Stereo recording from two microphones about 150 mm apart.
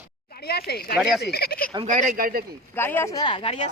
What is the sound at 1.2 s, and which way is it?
Speech, 90° left.